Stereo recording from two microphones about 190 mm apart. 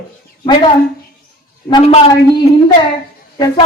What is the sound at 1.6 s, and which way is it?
Speech, 30° left (ahead or behind).